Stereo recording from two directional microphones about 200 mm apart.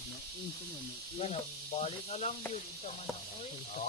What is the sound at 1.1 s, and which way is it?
Speech, 30° left (ahead or behind).